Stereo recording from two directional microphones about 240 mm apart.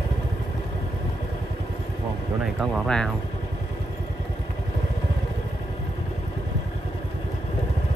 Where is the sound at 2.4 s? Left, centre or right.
Centre.